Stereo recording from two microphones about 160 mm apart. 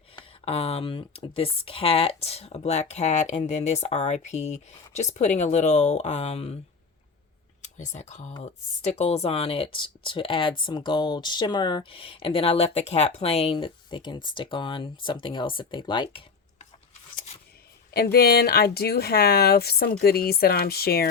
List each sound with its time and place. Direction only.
0.2 s speech: 40° left (ahead or behind)
7.8 s speech: 45° left (ahead or behind)
17.9 s speech: 80° left